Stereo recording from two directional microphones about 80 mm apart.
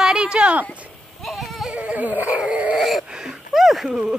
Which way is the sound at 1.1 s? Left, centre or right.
Centre.